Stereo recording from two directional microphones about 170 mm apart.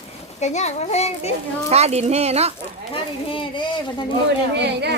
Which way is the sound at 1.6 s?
40° right (ahead or behind).